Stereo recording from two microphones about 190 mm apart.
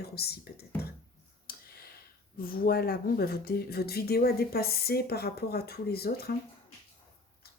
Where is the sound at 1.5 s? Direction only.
55° left (ahead or behind).